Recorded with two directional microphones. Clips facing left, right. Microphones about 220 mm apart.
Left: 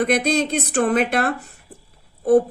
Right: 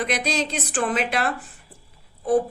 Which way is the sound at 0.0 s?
55° left (ahead or behind).